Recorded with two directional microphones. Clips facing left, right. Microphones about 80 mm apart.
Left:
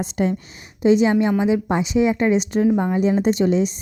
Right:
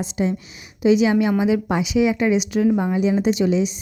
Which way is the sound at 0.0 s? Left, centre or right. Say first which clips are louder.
Left 1 dB; left.